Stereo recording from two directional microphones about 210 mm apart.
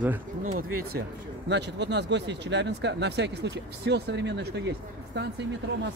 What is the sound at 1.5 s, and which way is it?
Speech, 55° right (ahead or behind).